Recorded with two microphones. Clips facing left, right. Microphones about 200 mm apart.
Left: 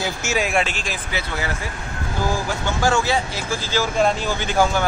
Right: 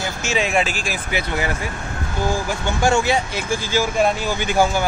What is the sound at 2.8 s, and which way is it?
Speech, 20° right (ahead or behind).